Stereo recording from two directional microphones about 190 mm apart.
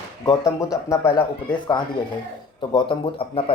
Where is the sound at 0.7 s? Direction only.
15° left (ahead or behind).